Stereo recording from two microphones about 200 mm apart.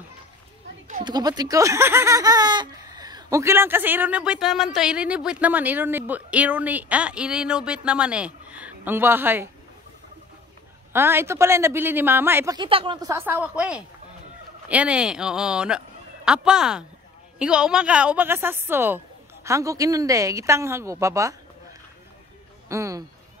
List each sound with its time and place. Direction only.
1.0 s speech: 20° right (ahead or behind)
10.9 s speech: 10° right (ahead or behind)
12.5 s speech: 25° right (ahead or behind)
22.7 s speech: 15° right (ahead or behind)